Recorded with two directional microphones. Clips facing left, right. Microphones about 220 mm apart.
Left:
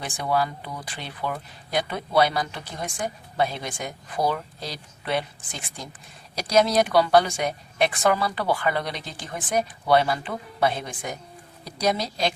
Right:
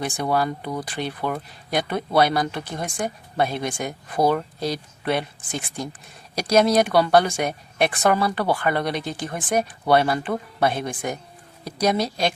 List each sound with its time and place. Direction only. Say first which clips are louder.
0.2 s speech: right 1 dB; 45° right (ahead or behind)
0.9 s speech: right 2 dB; 55° right (ahead or behind)